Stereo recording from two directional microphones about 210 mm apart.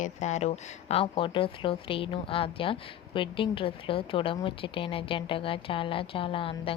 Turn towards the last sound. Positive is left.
turn(degrees=25)  # may be behind; listen again after turning